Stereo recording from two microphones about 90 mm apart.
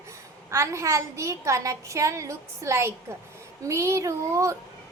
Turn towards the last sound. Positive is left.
turn(degrees=-35)  # may be behind; listen again after turning